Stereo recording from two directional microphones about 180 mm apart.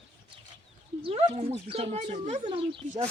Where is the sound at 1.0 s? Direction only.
35° right (ahead or behind).